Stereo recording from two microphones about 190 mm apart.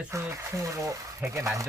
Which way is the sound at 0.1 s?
15° right (ahead or behind).